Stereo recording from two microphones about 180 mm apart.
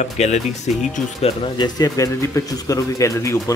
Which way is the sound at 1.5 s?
20° left (ahead or behind).